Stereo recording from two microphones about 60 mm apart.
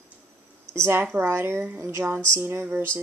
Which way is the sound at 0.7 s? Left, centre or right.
Right.